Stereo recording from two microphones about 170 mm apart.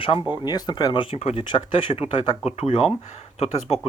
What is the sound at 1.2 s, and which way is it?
Speech, 40° left (ahead or behind).